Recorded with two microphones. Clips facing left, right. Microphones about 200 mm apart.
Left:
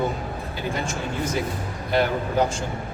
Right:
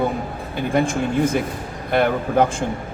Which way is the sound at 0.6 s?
55° right (ahead or behind).